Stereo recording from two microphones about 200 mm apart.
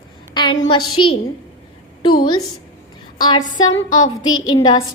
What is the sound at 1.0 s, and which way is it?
A woman's voice, 25° left (ahead or behind).